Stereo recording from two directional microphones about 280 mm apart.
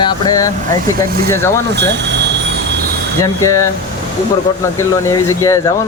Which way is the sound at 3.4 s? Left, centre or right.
Centre.